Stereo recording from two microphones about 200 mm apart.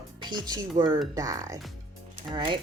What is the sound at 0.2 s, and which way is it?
A woman's voice, 20° right (ahead or behind).